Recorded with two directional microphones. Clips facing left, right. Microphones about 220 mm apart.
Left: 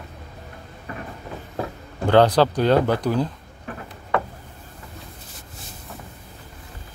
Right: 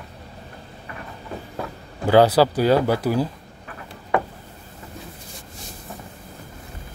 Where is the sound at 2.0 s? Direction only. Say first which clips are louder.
Right 1 dB; 5° right (ahead or behind).